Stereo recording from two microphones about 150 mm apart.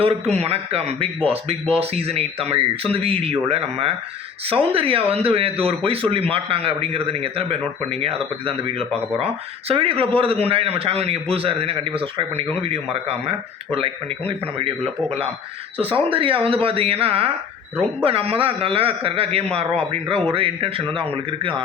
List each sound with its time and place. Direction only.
0.0 s speech: 45° right (ahead or behind)
15.8 s speech: 35° right (ahead or behind)